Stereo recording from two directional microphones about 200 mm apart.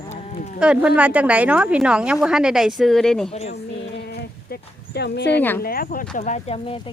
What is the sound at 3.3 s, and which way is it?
Speech, 30° left (ahead or behind).